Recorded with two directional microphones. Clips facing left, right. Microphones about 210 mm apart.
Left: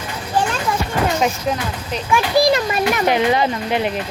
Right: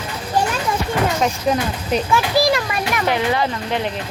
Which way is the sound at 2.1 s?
20° left (ahead or behind).